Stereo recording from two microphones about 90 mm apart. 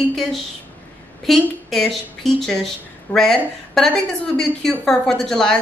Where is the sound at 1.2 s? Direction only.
Centre (ahead or behind).